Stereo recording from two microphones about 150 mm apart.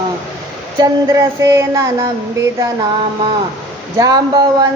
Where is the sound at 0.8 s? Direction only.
20° right (ahead or behind).